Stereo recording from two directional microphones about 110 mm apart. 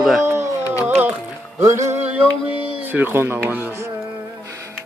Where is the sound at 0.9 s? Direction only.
15° right (ahead or behind).